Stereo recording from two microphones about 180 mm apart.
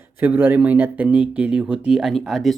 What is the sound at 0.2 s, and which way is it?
Speech, 10° right (ahead or behind).